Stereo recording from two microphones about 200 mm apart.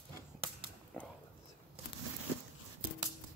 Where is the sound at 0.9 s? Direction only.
5° left (ahead or behind).